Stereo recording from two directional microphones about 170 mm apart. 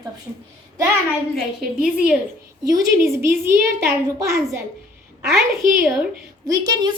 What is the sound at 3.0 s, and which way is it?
Speech, 15° right (ahead or behind).